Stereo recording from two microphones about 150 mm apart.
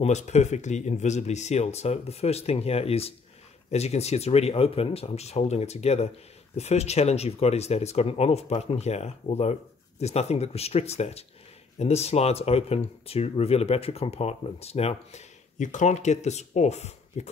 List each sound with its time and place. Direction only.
0.0 s speech: 50° left (ahead or behind)